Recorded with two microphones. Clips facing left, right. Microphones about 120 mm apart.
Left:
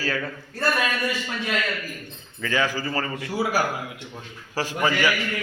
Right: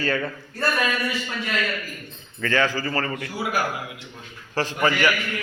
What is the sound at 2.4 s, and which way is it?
A man's voice, 10° left (ahead or behind).